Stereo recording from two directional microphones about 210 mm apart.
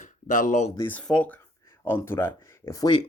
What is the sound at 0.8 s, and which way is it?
Speech, 10° left (ahead or behind).